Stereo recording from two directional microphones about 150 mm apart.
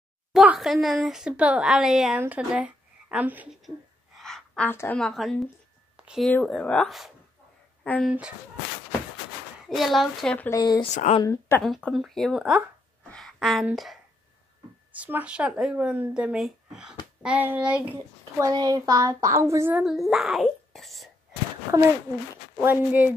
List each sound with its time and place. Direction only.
0.3 s a woman's voice: centre (ahead or behind)
3.6 s gasp: centre (ahead or behind)
4.6 s a woman's voice: 15° left (ahead or behind); by 6.3 s 5° right (ahead or behind)
6.3 s a woman's voice: 5° left (ahead or behind)
9.7 s a woman's voice: centre (ahead or behind)
10.5 s speech: 25° left (ahead or behind)
11.6 s a woman's voice: centre (ahead or behind)
13.1 s a sound: centre (ahead or behind)
15.0 s speech: 10° right (ahead or behind)
18.4 s a woman's voice: 25° right (ahead or behind)
19.8 s a woman's voice: centre (ahead or behind)
22.6 s speech: 15° right (ahead or behind)